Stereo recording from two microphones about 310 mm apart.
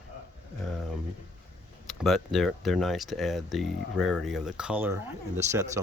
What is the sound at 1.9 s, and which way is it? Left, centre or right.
Speech, centre.